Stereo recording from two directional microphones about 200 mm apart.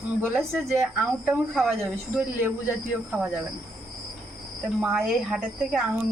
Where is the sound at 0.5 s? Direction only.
5° right (ahead or behind).